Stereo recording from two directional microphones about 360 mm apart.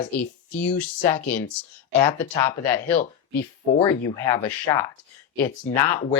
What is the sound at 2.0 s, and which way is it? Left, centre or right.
Speech, centre.